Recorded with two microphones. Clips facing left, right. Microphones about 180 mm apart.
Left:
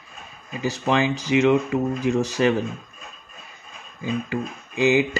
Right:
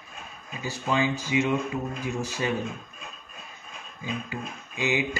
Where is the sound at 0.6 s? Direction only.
75° left (ahead or behind).